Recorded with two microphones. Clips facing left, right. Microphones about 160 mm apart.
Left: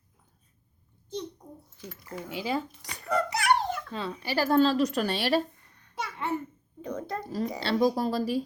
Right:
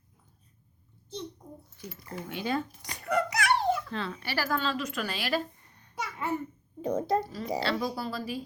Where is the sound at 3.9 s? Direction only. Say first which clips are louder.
Left 3 dB; 15° left (ahead or behind).